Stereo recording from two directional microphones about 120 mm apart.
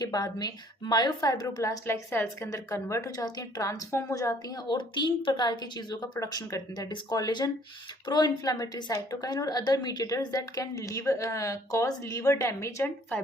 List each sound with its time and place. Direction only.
0.0 s a woman's voice: 35° left (ahead or behind); by 13.2 s 15° left (ahead or behind)